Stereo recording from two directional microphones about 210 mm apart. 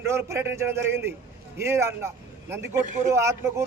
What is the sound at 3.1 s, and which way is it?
Speech, 15° right (ahead or behind).